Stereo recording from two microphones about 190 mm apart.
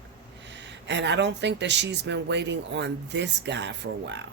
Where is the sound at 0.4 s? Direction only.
65° right (ahead or behind).